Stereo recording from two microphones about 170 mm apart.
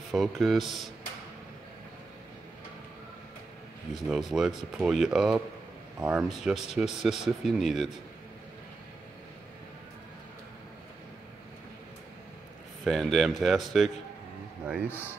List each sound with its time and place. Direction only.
0.1 s speech: centre (ahead or behind)
3.9 s speech: centre (ahead or behind)
12.8 s speech: centre (ahead or behind)
14.9 s speech: 10° left (ahead or behind)